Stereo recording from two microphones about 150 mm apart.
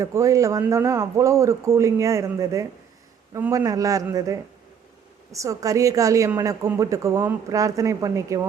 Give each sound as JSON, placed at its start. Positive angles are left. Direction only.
{"t": 0.0, "sound": "a woman's voice", "side_deg": -20}
{"t": 5.3, "sound": "a woman's voice", "side_deg": -20}